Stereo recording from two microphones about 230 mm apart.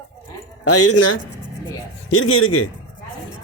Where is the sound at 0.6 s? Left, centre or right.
Left.